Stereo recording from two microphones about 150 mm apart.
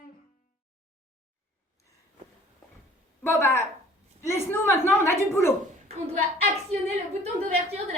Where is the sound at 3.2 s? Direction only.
20° left (ahead or behind).